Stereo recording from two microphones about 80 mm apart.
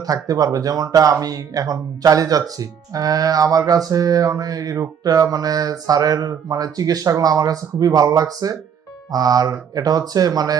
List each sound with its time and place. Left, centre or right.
0.1 s speech: right